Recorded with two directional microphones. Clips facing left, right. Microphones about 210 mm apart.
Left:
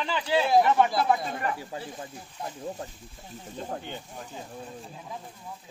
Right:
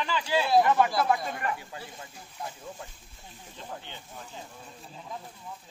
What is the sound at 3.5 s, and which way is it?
Speech, 45° left (ahead or behind).